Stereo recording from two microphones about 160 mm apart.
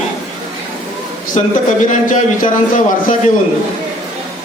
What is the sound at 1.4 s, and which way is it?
Speech, 45° left (ahead or behind).